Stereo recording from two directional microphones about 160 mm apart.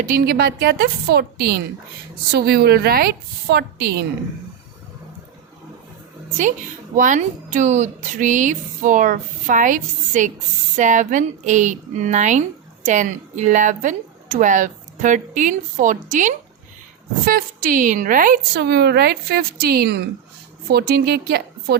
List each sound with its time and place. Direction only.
0.0 s speech: 70° right (ahead or behind)
6.3 s a woman's voice: 55° right (ahead or behind); by 21.8 s 70° right (ahead or behind)